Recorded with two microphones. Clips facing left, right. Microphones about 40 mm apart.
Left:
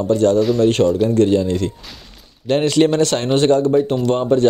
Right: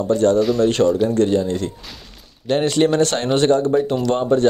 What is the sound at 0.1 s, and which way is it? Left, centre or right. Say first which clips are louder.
Speech: left 1 dB; left.